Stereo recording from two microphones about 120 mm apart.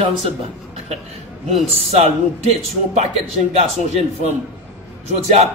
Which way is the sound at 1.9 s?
60° right (ahead or behind).